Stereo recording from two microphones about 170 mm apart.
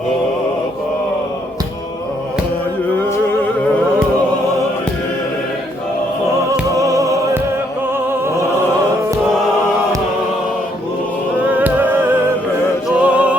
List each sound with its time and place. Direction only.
6.5 s music: 20° right (ahead or behind)
11.4 s music: 10° right (ahead or behind)
13.0 s music: 5° right (ahead or behind)